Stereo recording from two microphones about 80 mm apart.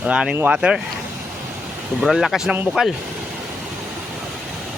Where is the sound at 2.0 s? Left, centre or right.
Centre.